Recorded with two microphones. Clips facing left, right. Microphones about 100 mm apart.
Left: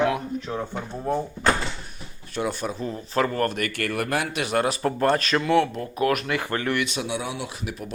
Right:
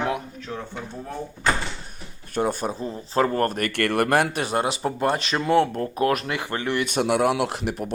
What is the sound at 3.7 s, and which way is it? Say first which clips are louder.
Speech: right 6 dB; 60° right (ahead or behind).